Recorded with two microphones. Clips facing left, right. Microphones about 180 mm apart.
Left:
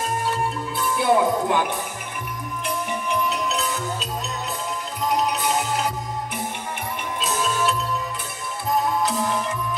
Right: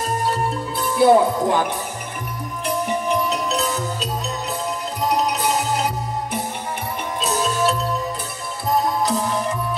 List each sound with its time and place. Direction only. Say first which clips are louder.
0.7 s music: right 6 dB; 35° right (ahead or behind)
3.3 s music: right 3 dB; 40° right (ahead or behind)
7.2 s music: right 3 dB; 40° right (ahead or behind)